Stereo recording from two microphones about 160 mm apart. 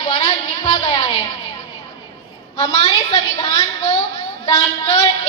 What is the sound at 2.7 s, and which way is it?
Speech, 40° left (ahead or behind).